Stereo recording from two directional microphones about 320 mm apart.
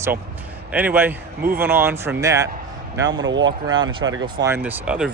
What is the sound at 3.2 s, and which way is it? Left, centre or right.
Speech, right.